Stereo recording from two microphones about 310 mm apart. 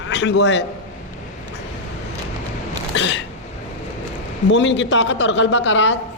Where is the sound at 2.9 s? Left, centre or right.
Left.